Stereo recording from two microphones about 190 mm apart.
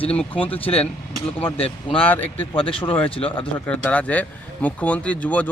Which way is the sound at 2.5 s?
30° left (ahead or behind).